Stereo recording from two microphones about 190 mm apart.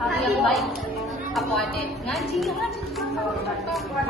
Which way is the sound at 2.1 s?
Centre (ahead or behind).